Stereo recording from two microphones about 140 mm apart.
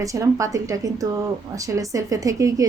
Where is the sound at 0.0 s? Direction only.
25° right (ahead or behind).